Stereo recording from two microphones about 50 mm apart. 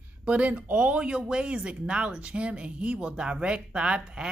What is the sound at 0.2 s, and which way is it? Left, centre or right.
A woman's voice, right.